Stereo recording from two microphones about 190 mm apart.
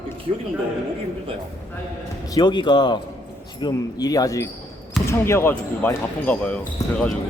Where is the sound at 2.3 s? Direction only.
25° left (ahead or behind); by 7.1 s 5° left (ahead or behind).